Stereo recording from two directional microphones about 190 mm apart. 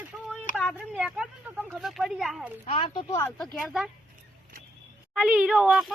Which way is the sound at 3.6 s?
Centre (ahead or behind).